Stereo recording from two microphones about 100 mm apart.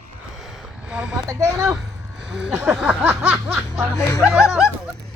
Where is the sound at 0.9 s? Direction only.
10° right (ahead or behind).